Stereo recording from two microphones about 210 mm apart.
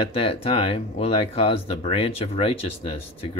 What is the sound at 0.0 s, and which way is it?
Speech, 25° left (ahead or behind).